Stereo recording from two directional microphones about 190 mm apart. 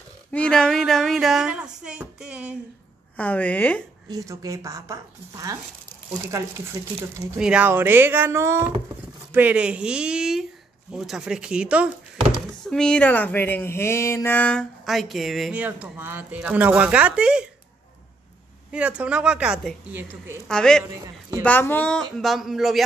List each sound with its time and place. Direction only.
0.3 s speech: 5° left (ahead or behind)
3.2 s a woman's voice: 10° left (ahead or behind)
4.1 s a woman's voice: 20° right (ahead or behind)
7.3 s a woman's voice: 5° right (ahead or behind)
18.7 s speech: 5° right (ahead or behind)
20.4 s a woman's voice: 5° left (ahead or behind)